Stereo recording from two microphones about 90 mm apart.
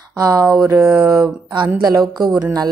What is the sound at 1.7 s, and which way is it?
Speech, 50° right (ahead or behind).